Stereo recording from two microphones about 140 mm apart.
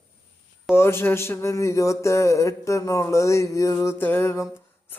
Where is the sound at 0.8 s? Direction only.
15° left (ahead or behind).